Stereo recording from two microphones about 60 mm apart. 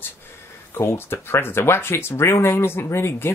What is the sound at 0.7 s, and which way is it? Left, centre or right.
Speech, left.